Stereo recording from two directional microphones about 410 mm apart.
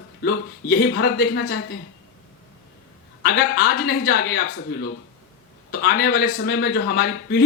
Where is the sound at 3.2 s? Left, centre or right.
Left.